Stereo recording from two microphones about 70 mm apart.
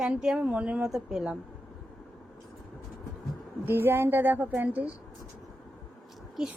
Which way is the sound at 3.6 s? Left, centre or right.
Right.